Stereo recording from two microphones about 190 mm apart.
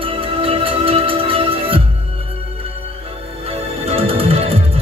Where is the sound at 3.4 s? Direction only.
30° right (ahead or behind).